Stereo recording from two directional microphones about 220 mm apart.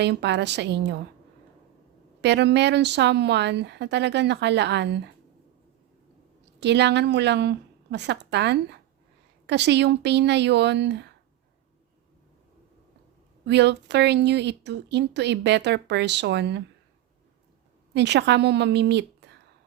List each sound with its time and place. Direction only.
0.0 s speech: 50° right (ahead or behind)
2.2 s speech: 50° right (ahead or behind)
6.6 s speech: 50° right (ahead or behind)
13.4 s speech: 50° right (ahead or behind)
17.9 s a woman's voice: 50° right (ahead or behind)